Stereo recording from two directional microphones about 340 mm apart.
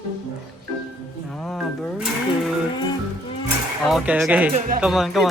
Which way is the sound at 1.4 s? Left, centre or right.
Centre.